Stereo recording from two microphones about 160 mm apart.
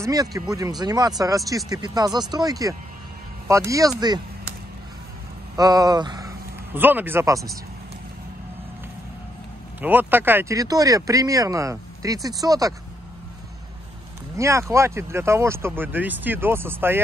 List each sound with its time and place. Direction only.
0.0 s speech: 25° right (ahead or behind)
5.6 s speech: 25° right (ahead or behind)
6.7 s speech: 10° right (ahead or behind)
9.8 s speech: 10° right (ahead or behind)
14.3 s speech: 20° right (ahead or behind)